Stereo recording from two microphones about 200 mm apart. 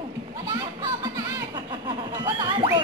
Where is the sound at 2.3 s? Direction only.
25° right (ahead or behind).